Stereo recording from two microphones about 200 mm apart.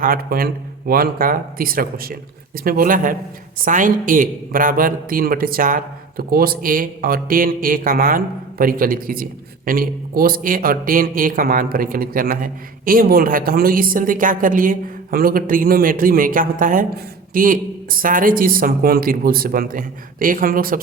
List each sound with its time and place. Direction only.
0.0 s a woman's voice: 45° right (ahead or behind)